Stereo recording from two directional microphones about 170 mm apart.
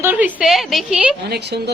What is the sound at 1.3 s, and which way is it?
Speech, 75° right (ahead or behind).